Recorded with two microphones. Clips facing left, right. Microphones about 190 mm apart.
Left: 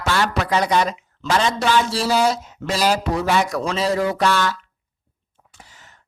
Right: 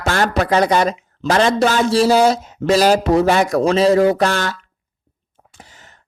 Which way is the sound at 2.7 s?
55° right (ahead or behind).